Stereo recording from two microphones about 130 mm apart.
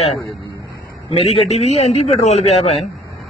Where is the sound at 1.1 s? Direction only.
55° left (ahead or behind).